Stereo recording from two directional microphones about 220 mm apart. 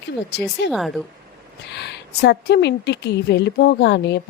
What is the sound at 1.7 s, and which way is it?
A woman's voice, 50° left (ahead or behind).